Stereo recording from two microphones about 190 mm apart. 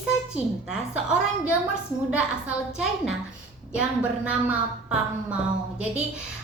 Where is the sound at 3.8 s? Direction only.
5° right (ahead or behind).